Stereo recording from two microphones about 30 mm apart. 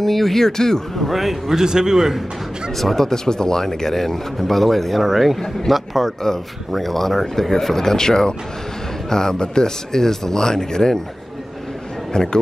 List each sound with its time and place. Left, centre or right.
0.0 s speech: centre
1.0 s a sound: centre
1.5 s speech: centre
2.8 s speech: centre
3.1 s speech: left; by 5.4 s centre
5.7 s a sound: centre
6.7 s speech: centre
12.1 s a man's voice: left